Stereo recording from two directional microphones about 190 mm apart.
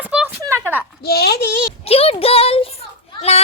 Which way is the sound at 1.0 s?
55° left (ahead or behind).